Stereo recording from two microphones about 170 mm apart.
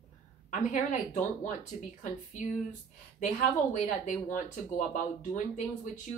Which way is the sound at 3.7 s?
50° left (ahead or behind).